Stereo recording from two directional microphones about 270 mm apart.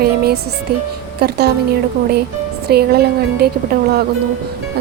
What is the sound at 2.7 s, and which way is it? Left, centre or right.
Speech, right.